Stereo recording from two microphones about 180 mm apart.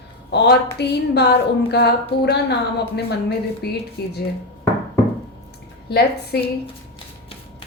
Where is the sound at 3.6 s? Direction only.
60° left (ahead or behind).